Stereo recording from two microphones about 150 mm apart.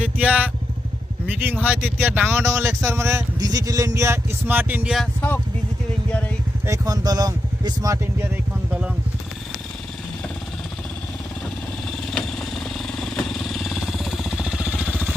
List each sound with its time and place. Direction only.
0.0 s vehicle: 10° right (ahead or behind)
1.6 s speech: 10° right (ahead or behind)
6.1 s vehicle: 10° left (ahead or behind)
6.7 s speech: 25° right (ahead or behind)
12.1 s vehicle: 5° left (ahead or behind)